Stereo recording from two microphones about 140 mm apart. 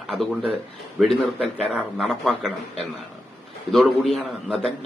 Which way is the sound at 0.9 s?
Centre (ahead or behind).